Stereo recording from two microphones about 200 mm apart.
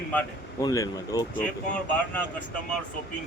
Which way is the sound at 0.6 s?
20° left (ahead or behind).